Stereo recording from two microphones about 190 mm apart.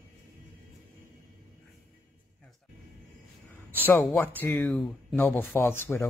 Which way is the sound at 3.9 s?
10° left (ahead or behind).